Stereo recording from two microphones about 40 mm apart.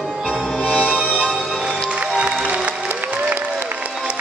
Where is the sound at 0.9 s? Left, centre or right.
Right.